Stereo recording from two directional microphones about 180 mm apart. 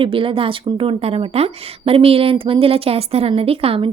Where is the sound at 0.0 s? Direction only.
30° right (ahead or behind).